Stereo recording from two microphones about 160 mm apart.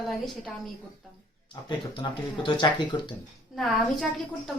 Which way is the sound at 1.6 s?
30° left (ahead or behind).